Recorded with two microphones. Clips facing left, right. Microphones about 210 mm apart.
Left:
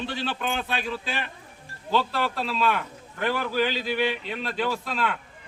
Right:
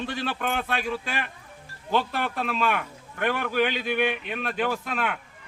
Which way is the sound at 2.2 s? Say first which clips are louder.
Left 1 dB; 55° right (ahead or behind).